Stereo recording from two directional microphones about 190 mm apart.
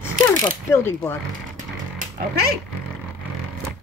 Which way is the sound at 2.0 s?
45° right (ahead or behind).